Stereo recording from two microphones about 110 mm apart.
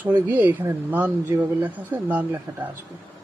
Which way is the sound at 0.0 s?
15° right (ahead or behind).